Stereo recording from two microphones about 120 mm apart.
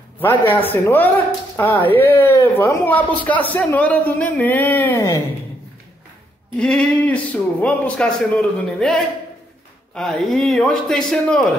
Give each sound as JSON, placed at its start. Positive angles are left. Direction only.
{"t": 0.2, "sound": "speech", "side_deg": 15}
{"t": 6.6, "sound": "a man's voice", "side_deg": 5}